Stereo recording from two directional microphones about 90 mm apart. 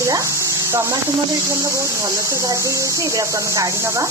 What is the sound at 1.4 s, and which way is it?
Speech, 35° right (ahead or behind).